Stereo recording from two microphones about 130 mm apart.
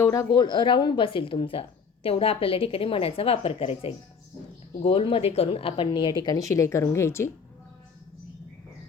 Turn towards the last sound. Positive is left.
turn(degrees=20)  # may be behind; listen again after turning